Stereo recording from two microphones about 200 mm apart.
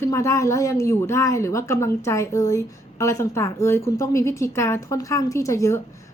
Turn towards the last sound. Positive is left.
turn(degrees=15)  # may be behind; listen again after turning